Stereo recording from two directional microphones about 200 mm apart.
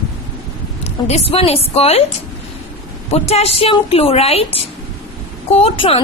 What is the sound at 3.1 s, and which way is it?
A woman's voice, 30° left (ahead or behind).